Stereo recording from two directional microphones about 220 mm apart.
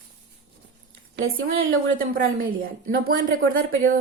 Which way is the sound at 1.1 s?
65° right (ahead or behind).